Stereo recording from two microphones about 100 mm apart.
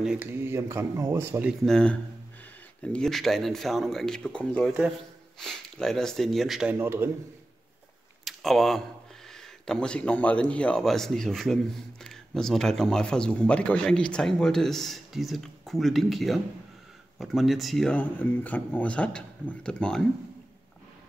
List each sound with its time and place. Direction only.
0.2 s speech: 25° right (ahead or behind)
1.7 s speech: 10° left (ahead or behind)
6.7 s speech: 25° right (ahead or behind)
8.3 s speech: centre (ahead or behind)
17.9 s speech: 15° left (ahead or behind)